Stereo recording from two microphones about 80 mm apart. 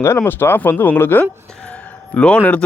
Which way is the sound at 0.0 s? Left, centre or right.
Left.